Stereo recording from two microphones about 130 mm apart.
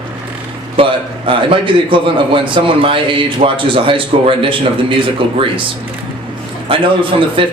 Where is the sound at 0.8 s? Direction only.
40° right (ahead or behind).